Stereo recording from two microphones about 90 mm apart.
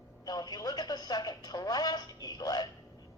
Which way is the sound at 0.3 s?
50° left (ahead or behind).